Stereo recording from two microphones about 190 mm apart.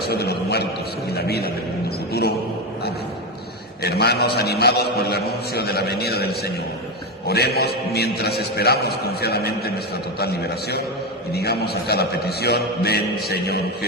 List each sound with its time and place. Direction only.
0.0 s a sound: 55° left (ahead or behind)
1.1 s a man's voice: 55° left (ahead or behind)
3.8 s a man's voice: 60° left (ahead or behind)